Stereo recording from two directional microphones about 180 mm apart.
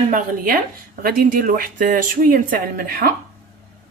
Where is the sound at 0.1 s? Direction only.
50° right (ahead or behind).